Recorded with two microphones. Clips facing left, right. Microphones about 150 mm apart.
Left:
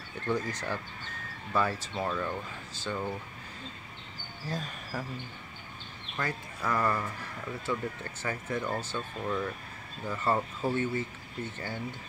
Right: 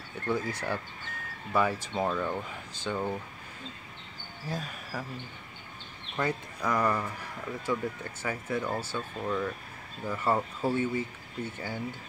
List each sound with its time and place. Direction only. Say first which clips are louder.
0.3 s speech: right 1 dB; 10° right (ahead or behind)
4.5 s speech: even; 10° right (ahead or behind)
6.1 s speech: right 4 dB; 15° right (ahead or behind)